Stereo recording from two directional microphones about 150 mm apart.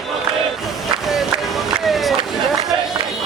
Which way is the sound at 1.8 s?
Centre (ahead or behind).